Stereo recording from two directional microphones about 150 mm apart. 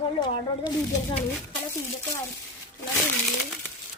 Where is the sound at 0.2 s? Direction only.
30° left (ahead or behind).